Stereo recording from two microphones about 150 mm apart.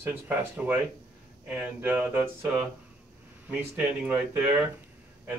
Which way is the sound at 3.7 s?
10° right (ahead or behind).